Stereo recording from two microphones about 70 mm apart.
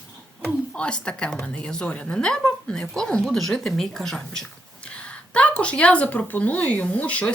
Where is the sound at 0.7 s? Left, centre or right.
Centre.